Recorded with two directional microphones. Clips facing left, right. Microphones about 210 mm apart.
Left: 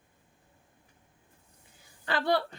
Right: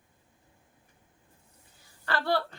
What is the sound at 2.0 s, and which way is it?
Speech, 20° left (ahead or behind).